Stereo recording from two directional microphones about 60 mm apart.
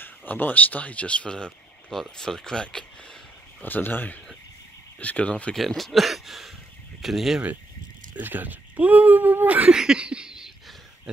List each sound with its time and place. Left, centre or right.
0.0 s speech: left; by 2.8 s centre
3.6 s speech: left
4.9 s speech: centre
5.5 s speech: centre
8.2 s speech: right
9.7 s a sound: centre